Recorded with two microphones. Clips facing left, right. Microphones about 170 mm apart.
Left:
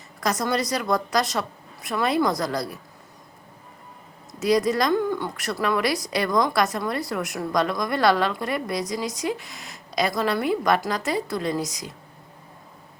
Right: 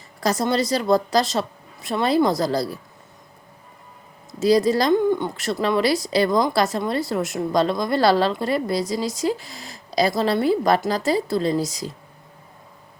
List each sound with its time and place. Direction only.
0.2 s speech: 30° right (ahead or behind)
4.3 s speech: 30° right (ahead or behind)